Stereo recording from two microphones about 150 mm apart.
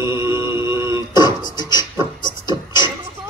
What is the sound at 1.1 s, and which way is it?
Beatboxing, 30° left (ahead or behind).